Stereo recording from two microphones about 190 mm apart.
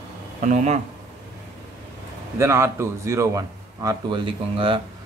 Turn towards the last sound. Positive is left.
turn(degrees=-25)  # may be behind; listen again after turning